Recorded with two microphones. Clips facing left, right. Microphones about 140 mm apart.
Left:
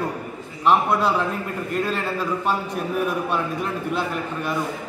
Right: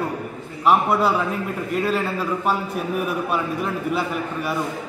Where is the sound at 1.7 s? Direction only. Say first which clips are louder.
Right 2 dB; 5° right (ahead or behind).